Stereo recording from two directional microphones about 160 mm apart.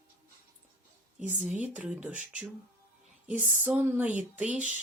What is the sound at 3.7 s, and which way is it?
Speech, 10° right (ahead or behind).